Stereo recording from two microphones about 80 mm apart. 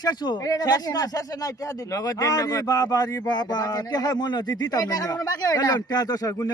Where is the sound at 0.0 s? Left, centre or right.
Left.